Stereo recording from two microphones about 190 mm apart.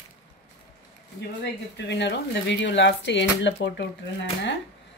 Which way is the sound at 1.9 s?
65° left (ahead or behind).